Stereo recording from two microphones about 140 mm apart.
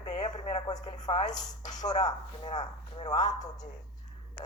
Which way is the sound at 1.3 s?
30° left (ahead or behind).